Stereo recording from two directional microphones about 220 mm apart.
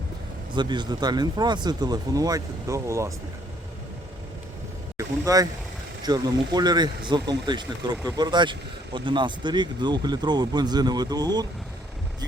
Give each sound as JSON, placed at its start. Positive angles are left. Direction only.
{"t": 0.5, "sound": "speech", "side_deg": -20}
{"t": 4.9, "sound": "speech", "side_deg": -15}